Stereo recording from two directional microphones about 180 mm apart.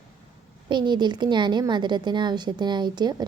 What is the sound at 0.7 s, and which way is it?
A woman's voice, 25° right (ahead or behind).